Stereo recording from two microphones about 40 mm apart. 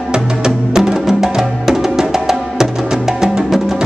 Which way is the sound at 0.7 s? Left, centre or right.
Centre.